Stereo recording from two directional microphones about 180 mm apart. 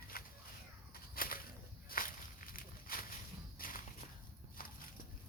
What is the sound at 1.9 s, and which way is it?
Walk, 50° left (ahead or behind).